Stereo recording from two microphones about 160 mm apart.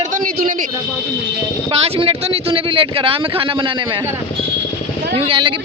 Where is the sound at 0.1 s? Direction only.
55° right (ahead or behind).